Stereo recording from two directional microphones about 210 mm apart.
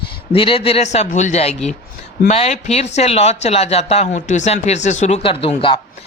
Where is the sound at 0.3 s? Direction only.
25° left (ahead or behind).